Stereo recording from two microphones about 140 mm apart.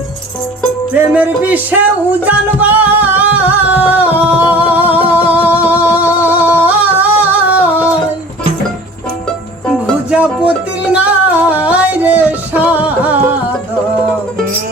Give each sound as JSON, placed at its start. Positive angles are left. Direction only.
{"t": 1.1, "sound": "music", "side_deg": -10}
{"t": 10.1, "sound": "music", "side_deg": -10}